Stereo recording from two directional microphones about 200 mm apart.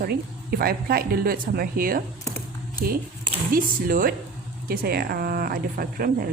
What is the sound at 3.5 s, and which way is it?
A woman's voice, 45° right (ahead or behind).